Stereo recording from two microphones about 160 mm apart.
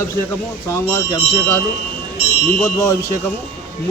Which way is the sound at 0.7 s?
15° left (ahead or behind).